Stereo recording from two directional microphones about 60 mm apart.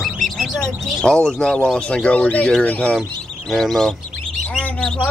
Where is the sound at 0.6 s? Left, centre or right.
Centre.